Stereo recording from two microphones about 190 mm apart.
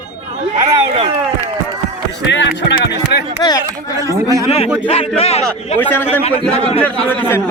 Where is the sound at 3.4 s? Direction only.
20° left (ahead or behind).